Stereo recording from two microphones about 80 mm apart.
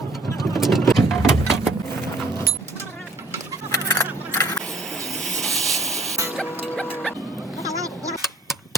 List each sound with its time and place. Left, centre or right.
0.3 s vehicle: centre
3.7 s a sound: left
4.9 s vehicle: centre
7.6 s vehicle: right